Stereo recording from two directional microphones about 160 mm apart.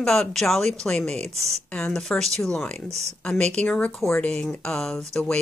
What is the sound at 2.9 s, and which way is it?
Speech, 40° right (ahead or behind).